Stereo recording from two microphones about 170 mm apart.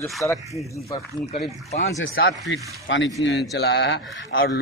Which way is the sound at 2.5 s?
90° left.